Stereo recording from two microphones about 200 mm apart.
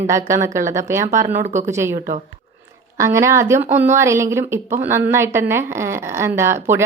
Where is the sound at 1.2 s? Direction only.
35° right (ahead or behind).